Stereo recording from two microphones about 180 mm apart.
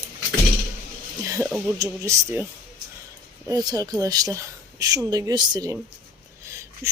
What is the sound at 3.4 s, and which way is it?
Speech, 20° right (ahead or behind).